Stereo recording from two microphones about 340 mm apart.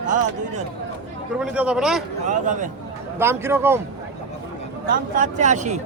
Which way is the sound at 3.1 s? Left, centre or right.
Centre.